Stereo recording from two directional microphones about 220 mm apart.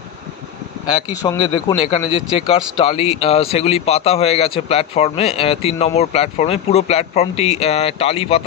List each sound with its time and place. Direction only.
1.2 s speech: 15° left (ahead or behind)
1.8 s speech: 25° left (ahead or behind)